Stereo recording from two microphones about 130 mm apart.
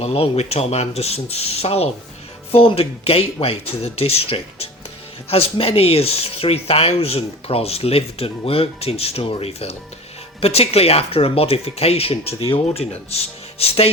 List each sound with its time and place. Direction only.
0.0 s speech: 50° left (ahead or behind)